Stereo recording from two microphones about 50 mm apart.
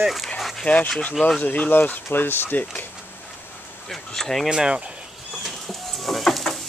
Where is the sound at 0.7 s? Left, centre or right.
Left.